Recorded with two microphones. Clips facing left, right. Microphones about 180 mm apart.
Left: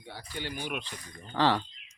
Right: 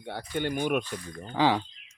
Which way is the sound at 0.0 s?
60° right (ahead or behind).